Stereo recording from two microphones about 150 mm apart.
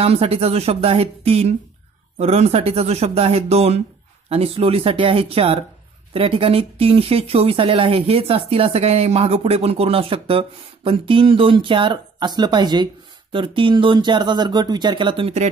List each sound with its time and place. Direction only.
0.0 s speech: 40° right (ahead or behind)